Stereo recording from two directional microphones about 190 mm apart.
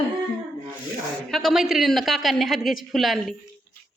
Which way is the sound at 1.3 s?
Centre (ahead or behind).